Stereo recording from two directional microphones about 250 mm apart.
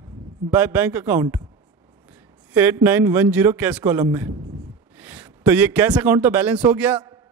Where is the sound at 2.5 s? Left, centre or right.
Centre.